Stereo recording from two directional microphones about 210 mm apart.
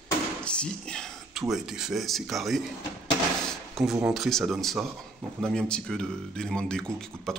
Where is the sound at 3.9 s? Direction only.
5° right (ahead or behind).